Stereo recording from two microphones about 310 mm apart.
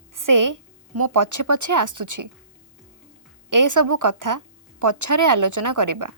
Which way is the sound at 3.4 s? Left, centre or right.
Right.